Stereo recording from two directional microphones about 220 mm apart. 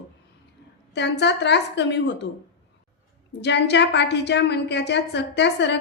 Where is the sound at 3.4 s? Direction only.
50° left (ahead or behind).